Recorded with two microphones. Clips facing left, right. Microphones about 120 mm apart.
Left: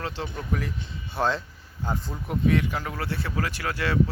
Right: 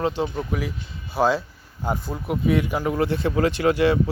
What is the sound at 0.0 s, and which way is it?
Speech, 15° right (ahead or behind).